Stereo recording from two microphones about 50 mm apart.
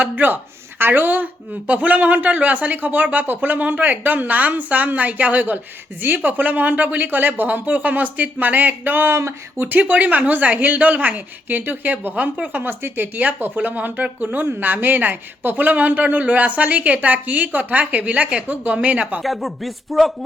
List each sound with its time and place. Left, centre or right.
0.0 s speech: right
9.6 s speech: right
19.2 s speech: centre